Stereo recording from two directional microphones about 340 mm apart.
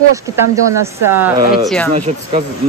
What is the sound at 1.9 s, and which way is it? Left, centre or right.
Speech, centre.